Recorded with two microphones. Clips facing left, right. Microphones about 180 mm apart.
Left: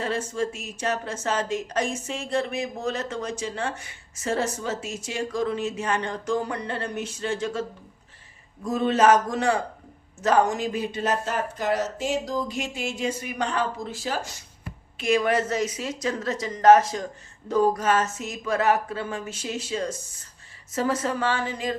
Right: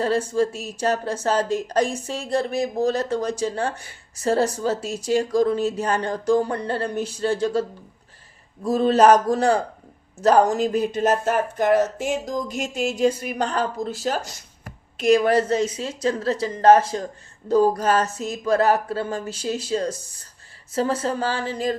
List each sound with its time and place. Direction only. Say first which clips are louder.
0.0 s speech: right 6 dB; 35° right (ahead or behind)
8.6 s speech: right 4 dB; 35° right (ahead or behind)